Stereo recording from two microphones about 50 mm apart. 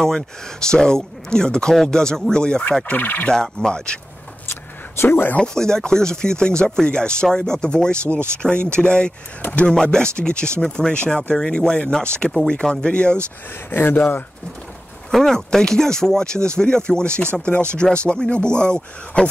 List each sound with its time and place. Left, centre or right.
0.0 s chopping: centre
2.9 s speech: left
3.3 s chopping: centre
4.5 s a sound: left
5.4 s chopping: centre
8.4 s speech: left
10.6 s chopping: centre
12.8 s speech: centre
13.7 s speech: left
15.0 s chopping: centre
17.7 s speech: left
18.3 s chopping: centre